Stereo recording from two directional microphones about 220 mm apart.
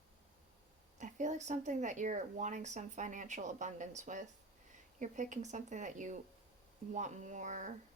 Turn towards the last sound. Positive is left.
turn(degrees=-35)  # may be behind; listen again after turning